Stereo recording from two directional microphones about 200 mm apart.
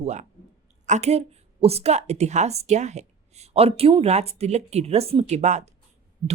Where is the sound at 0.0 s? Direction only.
35° right (ahead or behind).